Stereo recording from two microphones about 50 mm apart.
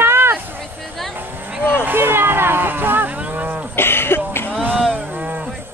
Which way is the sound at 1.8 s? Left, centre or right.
Right.